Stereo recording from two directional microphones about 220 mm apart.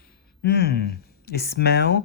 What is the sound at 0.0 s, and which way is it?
Speech, 45° left (ahead or behind).